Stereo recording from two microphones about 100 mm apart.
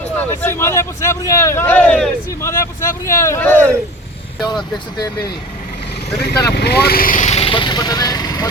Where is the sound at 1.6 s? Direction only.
10° left (ahead or behind).